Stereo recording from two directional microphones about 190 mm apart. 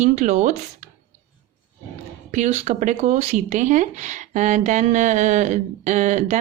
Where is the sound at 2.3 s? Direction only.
35° right (ahead or behind).